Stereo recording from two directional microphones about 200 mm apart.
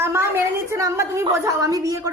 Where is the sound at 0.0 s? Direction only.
15° right (ahead or behind).